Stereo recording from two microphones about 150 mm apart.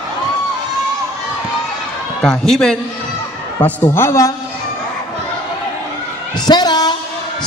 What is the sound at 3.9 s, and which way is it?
Speech, 20° left (ahead or behind).